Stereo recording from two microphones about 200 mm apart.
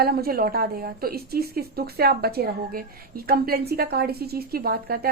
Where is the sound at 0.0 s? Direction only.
50° right (ahead or behind).